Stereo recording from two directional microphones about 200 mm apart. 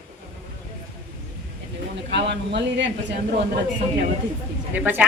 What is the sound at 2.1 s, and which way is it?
Speech, 60° right (ahead or behind).